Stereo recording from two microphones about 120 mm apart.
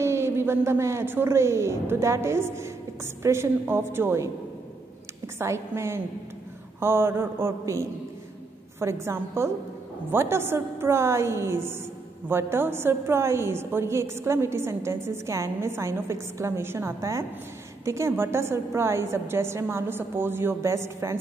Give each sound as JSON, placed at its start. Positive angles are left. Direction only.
{"t": 0.0, "sound": "a woman's voice", "side_deg": -20}
{"t": 5.4, "sound": "a woman's voice", "side_deg": -20}